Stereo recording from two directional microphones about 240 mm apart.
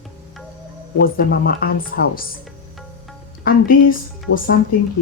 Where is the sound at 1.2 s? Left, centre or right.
Left.